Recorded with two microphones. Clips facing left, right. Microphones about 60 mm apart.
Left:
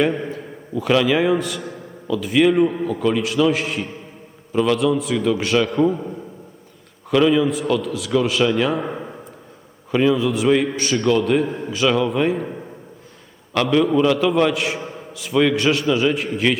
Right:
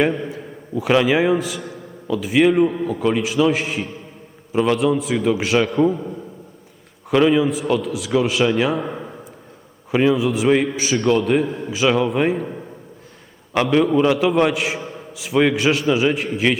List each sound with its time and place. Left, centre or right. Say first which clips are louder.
0.0 s a sound: even; centre
0.9 s a man's voice: right 1 dB; centre
1.3 s a man's voice: even; centre
2.0 s a man's voice: even; centre
4.5 s a man's voice: even; centre
4.8 s a man's voice: even; centre
7.3 s a man's voice: even; centre
8.7 s a man's voice: even; centre
9.9 s a man's voice: even; centre
12.3 s a man's voice: even; centre
13.5 s a man's voice: right 1 dB; centre
14.9 s a sound: even; centre
15.5 s a man's voice: even; centre